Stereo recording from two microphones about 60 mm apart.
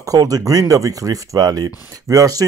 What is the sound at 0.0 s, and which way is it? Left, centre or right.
Speech, right.